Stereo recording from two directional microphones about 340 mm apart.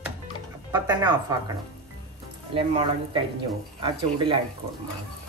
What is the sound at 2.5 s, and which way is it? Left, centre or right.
Speech, centre.